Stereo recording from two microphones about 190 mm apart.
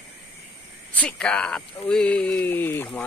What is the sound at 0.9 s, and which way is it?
Speech, 5° left (ahead or behind).